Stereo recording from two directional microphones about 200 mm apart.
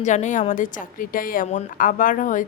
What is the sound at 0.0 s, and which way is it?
A woman's voice, 35° left (ahead or behind).